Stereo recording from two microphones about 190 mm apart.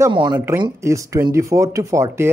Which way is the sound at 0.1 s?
25° right (ahead or behind).